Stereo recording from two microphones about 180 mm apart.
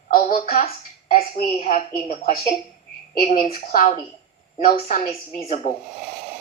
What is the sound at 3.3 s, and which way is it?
Speech, 50° left (ahead or behind).